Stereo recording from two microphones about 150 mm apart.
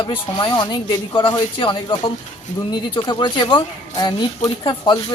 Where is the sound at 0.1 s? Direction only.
35° left (ahead or behind).